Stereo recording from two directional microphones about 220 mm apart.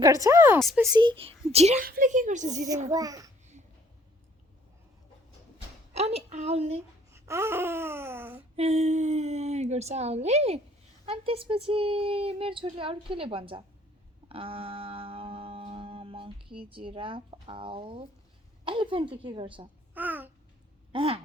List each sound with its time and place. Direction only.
0.0 s babbling: 15° right (ahead or behind)
0.8 s speech: 20° right (ahead or behind)
2.9 s babbling: 15° right (ahead or behind)
5.9 s speech: 30° right (ahead or behind)
7.1 s babbling: 10° right (ahead or behind)
8.5 s speech: 30° right (ahead or behind)
14.3 s a sound: 25° right (ahead or behind)
18.6 s speech: 25° right (ahead or behind)
19.9 s speech: 10° right (ahead or behind)
20.9 s speech: 25° right (ahead or behind)